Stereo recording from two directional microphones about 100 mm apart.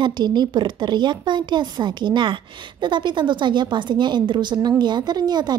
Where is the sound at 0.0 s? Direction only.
45° right (ahead or behind).